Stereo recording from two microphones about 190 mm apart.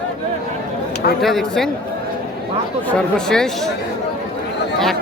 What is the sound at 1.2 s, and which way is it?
Speech, centre (ahead or behind).